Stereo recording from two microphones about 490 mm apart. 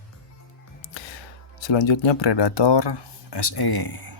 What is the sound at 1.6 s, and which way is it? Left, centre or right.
Speech, left.